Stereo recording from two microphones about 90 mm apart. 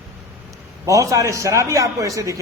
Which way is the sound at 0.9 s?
40° right (ahead or behind).